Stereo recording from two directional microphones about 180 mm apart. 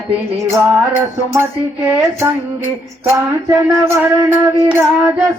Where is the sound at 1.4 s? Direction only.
15° right (ahead or behind).